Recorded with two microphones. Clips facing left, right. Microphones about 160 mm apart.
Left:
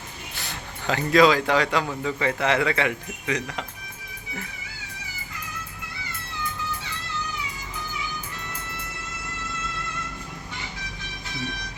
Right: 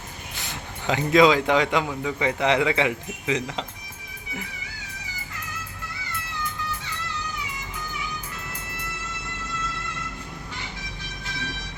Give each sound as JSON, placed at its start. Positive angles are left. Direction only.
{"t": 0.3, "sound": "speech", "side_deg": -20}